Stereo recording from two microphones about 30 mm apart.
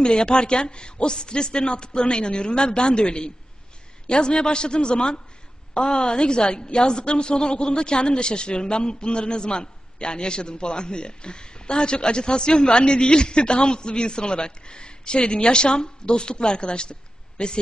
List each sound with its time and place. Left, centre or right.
0.0 s a woman's voice: left